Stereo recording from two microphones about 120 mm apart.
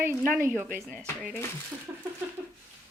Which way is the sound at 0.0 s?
20° right (ahead or behind).